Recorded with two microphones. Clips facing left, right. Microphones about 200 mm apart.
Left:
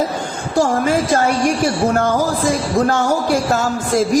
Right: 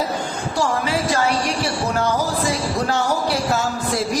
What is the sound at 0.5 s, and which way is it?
A woman's voice, 50° left (ahead or behind).